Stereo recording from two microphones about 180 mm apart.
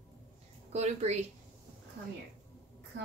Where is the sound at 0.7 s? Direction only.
40° right (ahead or behind).